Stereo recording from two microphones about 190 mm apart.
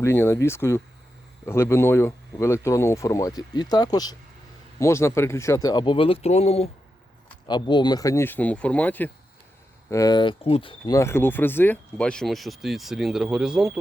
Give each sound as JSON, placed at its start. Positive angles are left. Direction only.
{"t": 0.0, "sound": "speech", "side_deg": 15}
{"t": 9.9, "sound": "speech", "side_deg": 20}
{"t": 10.9, "sound": "speech", "side_deg": 15}